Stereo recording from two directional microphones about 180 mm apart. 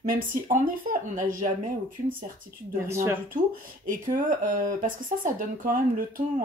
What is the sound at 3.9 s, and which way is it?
Speech, 45° right (ahead or behind).